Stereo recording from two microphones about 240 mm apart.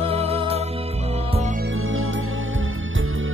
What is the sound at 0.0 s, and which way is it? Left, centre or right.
Music, right.